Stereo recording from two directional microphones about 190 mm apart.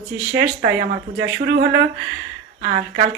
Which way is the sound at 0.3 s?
65° right (ahead or behind).